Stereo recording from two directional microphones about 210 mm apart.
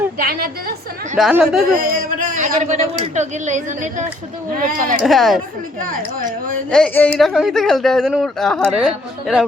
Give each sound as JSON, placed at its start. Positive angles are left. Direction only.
{"t": 0.2, "sound": "a woman's voice", "side_deg": -45}
{"t": 1.1, "sound": "speech", "side_deg": -5}
{"t": 1.7, "sound": "speech", "side_deg": -45}
{"t": 5.0, "sound": "speech", "side_deg": 0}
{"t": 5.8, "sound": "speech", "side_deg": -40}
{"t": 6.7, "sound": "speech", "side_deg": 5}